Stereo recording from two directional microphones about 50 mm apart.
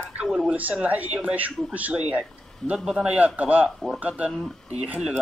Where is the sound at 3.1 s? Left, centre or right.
Right.